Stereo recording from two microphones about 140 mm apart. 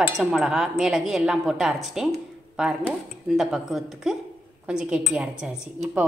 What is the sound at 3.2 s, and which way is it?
A woman's voice, centre (ahead or behind).